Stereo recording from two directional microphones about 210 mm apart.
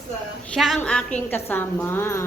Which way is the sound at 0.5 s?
Centre (ahead or behind).